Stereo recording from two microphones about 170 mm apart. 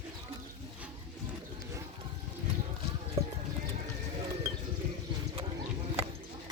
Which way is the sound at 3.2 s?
35° right (ahead or behind).